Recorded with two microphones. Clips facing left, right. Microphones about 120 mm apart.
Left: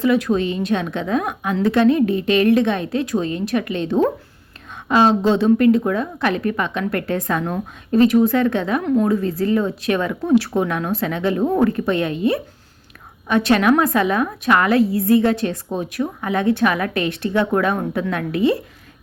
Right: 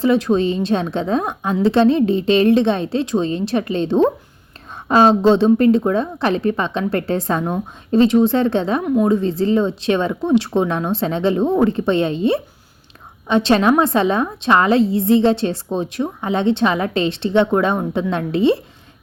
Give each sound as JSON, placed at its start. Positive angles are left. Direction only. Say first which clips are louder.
{"t": 0.0, "sound": "a woman's voice", "louder": "right 2 dB", "side_deg": -30}